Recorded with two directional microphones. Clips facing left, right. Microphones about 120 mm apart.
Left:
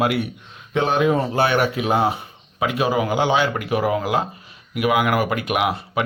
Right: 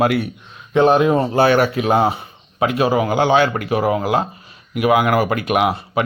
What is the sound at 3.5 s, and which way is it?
Speech, 35° right (ahead or behind).